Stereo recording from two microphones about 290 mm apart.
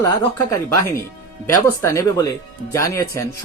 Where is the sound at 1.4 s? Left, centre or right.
Centre.